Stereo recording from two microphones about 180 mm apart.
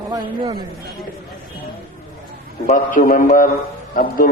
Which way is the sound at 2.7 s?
50° left (ahead or behind).